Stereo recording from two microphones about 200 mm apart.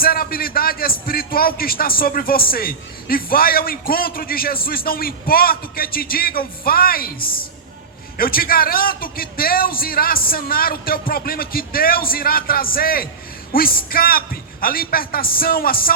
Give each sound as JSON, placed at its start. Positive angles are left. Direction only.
{"t": 0.0, "sound": "a man's voice", "side_deg": 45}